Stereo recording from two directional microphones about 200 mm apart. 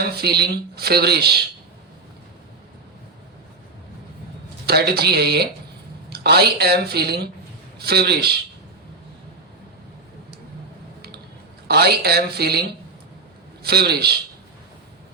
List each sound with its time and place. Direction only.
0.2 s speech: 55° right (ahead or behind)
4.6 s speech: 55° right (ahead or behind)
11.7 s speech: 55° right (ahead or behind)